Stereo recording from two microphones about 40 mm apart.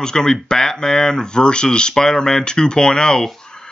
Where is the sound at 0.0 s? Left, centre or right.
Centre.